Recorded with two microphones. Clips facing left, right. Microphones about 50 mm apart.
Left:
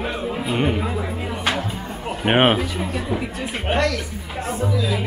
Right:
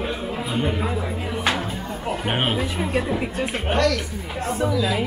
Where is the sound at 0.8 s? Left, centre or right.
Centre.